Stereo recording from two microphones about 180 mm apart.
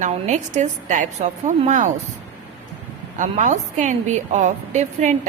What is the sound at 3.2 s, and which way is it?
A woman's voice, 45° right (ahead or behind).